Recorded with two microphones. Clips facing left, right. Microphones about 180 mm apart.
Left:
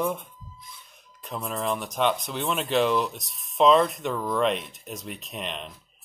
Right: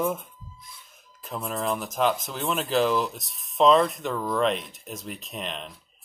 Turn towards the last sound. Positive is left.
turn(degrees=0)  # may be behind; listen again after turning